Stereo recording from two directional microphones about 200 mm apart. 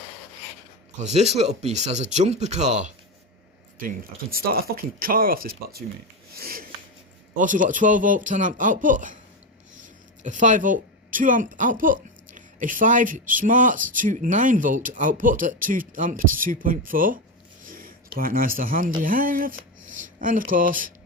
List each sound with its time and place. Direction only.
0.9 s speech: 35° right (ahead or behind)
17.6 s a sound: 45° right (ahead or behind)
18.2 s speech: 45° right (ahead or behind)